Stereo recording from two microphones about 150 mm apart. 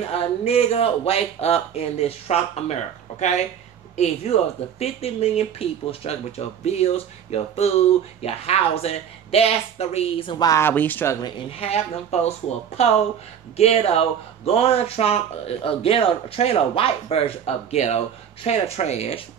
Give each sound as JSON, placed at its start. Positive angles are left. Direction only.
{"t": 0.1, "sound": "speech", "side_deg": 40}
{"t": 10.4, "sound": "speech", "side_deg": 20}
{"t": 11.6, "sound": "speech", "side_deg": 45}